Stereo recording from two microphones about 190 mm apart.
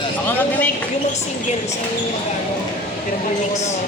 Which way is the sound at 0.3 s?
10° left (ahead or behind).